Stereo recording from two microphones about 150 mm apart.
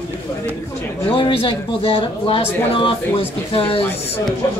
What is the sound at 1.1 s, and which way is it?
Speech, 40° left (ahead or behind).